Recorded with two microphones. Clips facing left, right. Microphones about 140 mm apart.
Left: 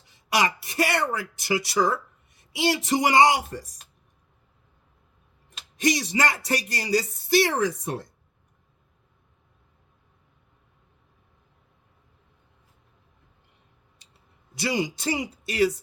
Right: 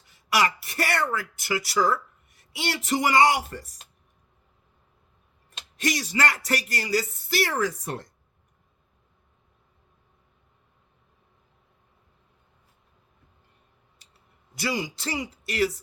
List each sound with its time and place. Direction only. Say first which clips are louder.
0.0 s a sound: even; 20° left (ahead or behind)
2.4 s speech: left 6 dB; 20° left (ahead or behind)
5.9 s speech: left 1 dB; 20° left (ahead or behind)
14.7 s speech: left 4 dB; 20° left (ahead or behind)